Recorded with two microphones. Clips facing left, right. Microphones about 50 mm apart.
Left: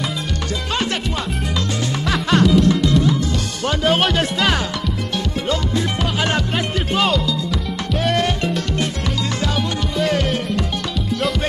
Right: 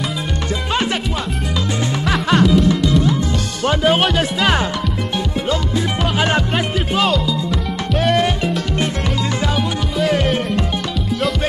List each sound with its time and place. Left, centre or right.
2.0 s music: centre
3.6 s music: centre
6.1 s music: centre
6.5 s music: centre
9.9 s music: centre